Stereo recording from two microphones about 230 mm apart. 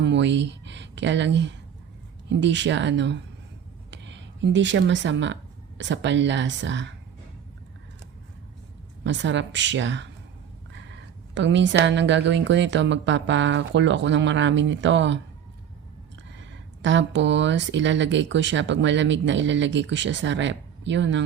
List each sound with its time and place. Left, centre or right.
0.0 s speech: right
9.0 s speech: right
16.4 s speech: right